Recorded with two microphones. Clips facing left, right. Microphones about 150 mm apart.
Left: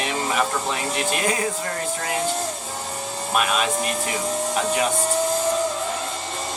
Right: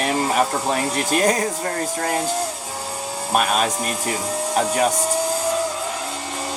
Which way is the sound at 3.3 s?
40° right (ahead or behind).